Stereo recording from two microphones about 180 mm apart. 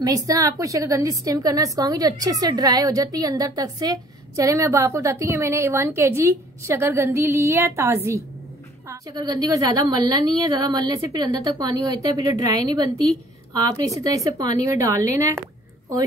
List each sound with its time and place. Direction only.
0.0 s a woman's voice: 20° right (ahead or behind)